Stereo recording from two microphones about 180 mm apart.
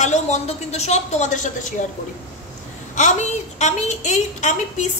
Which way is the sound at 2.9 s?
40° left (ahead or behind).